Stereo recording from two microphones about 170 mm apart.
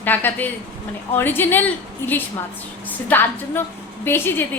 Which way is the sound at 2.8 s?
10° left (ahead or behind).